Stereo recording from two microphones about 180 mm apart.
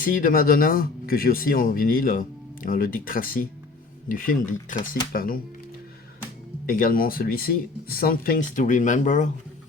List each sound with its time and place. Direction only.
0.0 s speech: 50° left (ahead or behind)
6.7 s speech: 55° left (ahead or behind)